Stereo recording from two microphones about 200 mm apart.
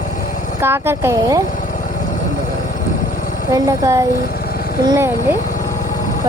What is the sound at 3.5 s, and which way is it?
Speech, 15° right (ahead or behind).